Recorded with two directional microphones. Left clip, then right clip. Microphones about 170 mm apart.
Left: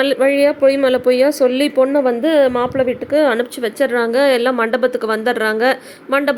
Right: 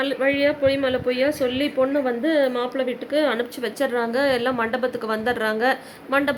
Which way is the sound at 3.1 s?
40° left (ahead or behind).